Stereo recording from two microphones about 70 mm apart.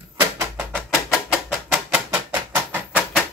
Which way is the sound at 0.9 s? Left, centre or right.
Centre.